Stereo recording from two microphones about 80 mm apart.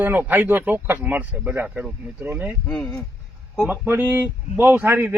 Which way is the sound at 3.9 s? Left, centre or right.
Right.